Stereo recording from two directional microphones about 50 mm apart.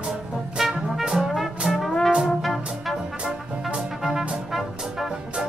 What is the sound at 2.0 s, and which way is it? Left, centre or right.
Brass instrument, centre.